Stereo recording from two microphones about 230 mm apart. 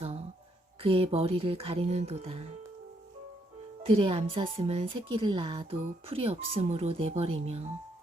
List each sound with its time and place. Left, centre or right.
0.8 s speech: right
3.8 s speech: right